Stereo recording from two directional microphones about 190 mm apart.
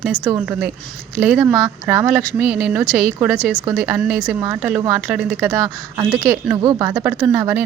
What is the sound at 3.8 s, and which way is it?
Speech, 5° right (ahead or behind).